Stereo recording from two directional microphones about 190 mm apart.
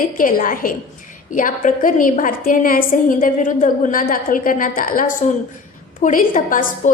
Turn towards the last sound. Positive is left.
turn(degrees=45)  # may be behind; listen again after turning